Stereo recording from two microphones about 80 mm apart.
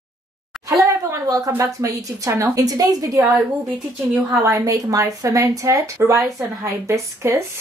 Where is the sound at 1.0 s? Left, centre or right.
Right.